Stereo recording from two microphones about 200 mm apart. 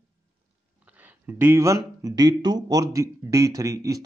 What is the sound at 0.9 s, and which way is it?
Speech, 10° right (ahead or behind).